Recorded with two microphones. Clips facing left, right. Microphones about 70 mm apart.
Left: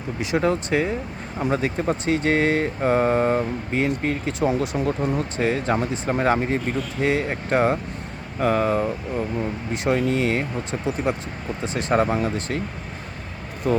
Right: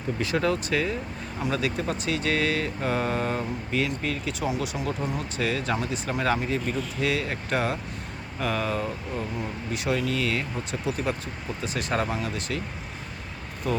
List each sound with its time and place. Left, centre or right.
0.2 s speech: left
13.7 s speech: left